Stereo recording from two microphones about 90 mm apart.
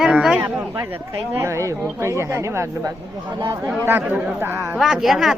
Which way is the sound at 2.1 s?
30° right (ahead or behind).